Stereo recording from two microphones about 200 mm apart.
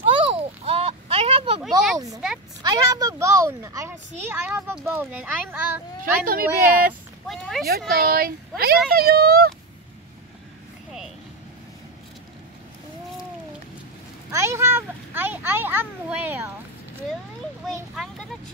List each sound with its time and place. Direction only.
0.1 s a sound: 30° right (ahead or behind)
1.6 s speech: centre (ahead or behind)
2.6 s a woman's voice: 20° right (ahead or behind)
6.2 s speech: 45° right (ahead or behind)
7.2 s speech: centre (ahead or behind)
7.9 s speech: 45° right (ahead or behind)
14.3 s a child's voice: 15° right (ahead or behind)